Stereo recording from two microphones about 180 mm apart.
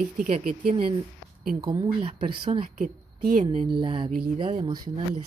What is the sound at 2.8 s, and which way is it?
Speech, 50° right (ahead or behind).